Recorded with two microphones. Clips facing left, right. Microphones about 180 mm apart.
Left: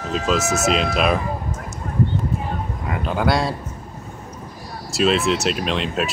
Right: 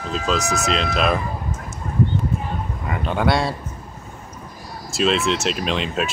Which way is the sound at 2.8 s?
Centre (ahead or behind).